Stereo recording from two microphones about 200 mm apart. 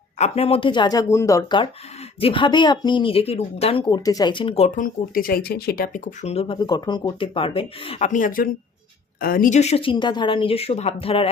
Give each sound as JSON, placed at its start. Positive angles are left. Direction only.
{"t": 0.2, "sound": "speech", "side_deg": 30}
{"t": 5.1, "sound": "speech", "side_deg": 45}